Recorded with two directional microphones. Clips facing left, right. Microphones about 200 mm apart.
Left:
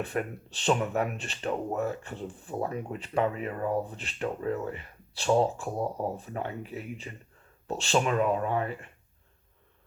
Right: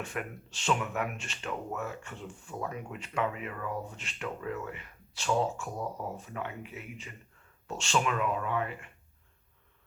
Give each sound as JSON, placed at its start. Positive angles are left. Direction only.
{"t": 0.0, "sound": "speech", "side_deg": 35}